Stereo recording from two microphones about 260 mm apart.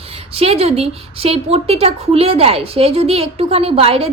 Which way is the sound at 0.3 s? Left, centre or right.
Right.